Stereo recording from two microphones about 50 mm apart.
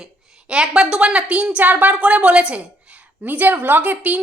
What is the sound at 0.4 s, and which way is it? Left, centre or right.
A woman's voice, centre.